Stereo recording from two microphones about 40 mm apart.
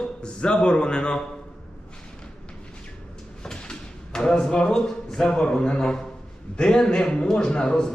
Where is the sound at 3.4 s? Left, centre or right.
Centre.